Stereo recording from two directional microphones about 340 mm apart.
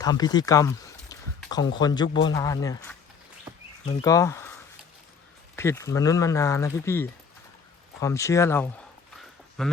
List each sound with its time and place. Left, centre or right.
0.0 s speech: centre
4.0 s speech: centre
5.5 s speech: centre
9.1 s a sound: centre